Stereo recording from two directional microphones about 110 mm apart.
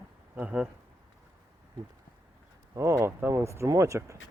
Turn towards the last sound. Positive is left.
turn(degrees=-30)  # may be behind; listen again after turning